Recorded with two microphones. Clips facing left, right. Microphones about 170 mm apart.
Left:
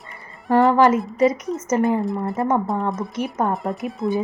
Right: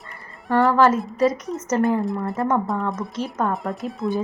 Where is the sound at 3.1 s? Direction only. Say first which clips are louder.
Left 1 dB; 15° left (ahead or behind).